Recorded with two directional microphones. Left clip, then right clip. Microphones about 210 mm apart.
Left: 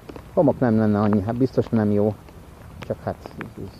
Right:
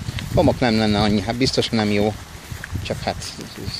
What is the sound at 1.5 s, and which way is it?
Speech, 25° left (ahead or behind).